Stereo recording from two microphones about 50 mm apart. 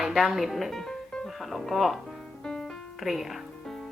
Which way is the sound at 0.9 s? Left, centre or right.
Centre.